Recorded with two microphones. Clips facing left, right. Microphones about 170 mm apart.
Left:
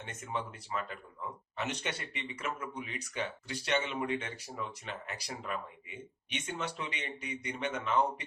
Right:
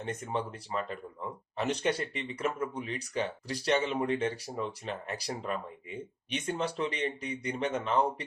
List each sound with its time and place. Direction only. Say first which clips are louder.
0.0 s speech: right 5 dB; 35° right (ahead or behind)